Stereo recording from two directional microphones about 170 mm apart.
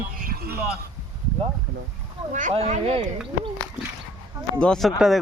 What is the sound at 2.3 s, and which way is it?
Speech, 40° right (ahead or behind).